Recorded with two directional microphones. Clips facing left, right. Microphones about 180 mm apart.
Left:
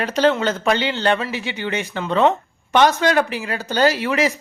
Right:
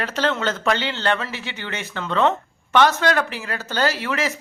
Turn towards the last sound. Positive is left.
turn(degrees=15)  # may be behind; listen again after turning